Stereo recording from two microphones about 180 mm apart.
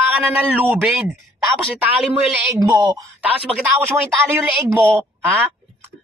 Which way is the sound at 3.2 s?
10° right (ahead or behind).